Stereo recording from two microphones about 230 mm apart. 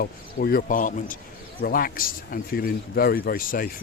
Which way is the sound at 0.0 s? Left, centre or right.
Left.